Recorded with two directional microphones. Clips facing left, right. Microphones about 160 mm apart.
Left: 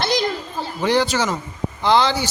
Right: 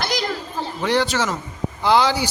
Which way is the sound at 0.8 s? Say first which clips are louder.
Left 2 dB; centre (ahead or behind).